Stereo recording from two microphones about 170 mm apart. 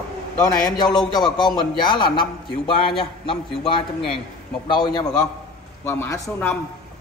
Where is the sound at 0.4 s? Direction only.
20° left (ahead or behind).